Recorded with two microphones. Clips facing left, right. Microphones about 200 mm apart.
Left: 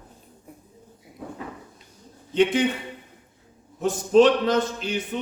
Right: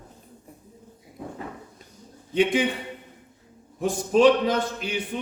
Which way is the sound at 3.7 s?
10° right (ahead or behind).